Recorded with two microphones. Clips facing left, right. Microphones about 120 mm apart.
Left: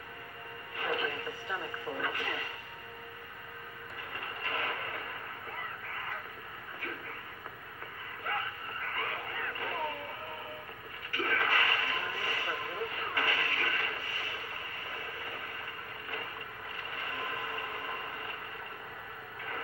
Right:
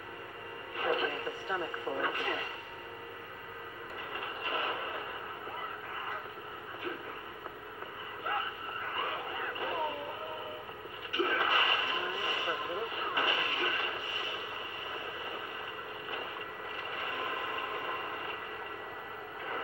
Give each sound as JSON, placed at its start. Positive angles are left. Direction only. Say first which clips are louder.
{"t": 0.7, "sound": "radio", "louder": "right 2 dB", "side_deg": -20}
{"t": 4.4, "sound": "train", "louder": "right 1 dB", "side_deg": -20}
{"t": 8.3, "sound": "a sound", "louder": "right 1 dB", "side_deg": -15}
{"t": 11.1, "sound": "radio", "louder": "right 1 dB", "side_deg": -20}
{"t": 15.0, "sound": "a sound", "louder": "right 2 dB", "side_deg": -20}
{"t": 16.9, "sound": "train", "louder": "right 1 dB", "side_deg": -20}